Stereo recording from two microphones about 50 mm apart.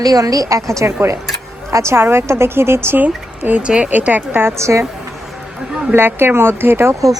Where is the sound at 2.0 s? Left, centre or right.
Right.